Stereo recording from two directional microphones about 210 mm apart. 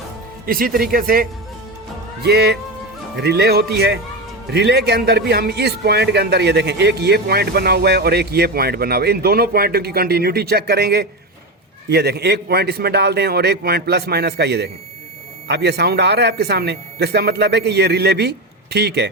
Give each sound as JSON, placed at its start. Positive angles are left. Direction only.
{"t": 0.4, "sound": "a man's voice", "side_deg": -45}